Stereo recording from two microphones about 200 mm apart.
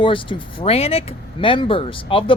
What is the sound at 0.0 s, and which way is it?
Speech, 25° left (ahead or behind).